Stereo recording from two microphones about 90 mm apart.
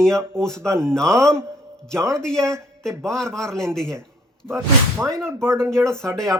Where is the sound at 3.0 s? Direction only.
5° left (ahead or behind).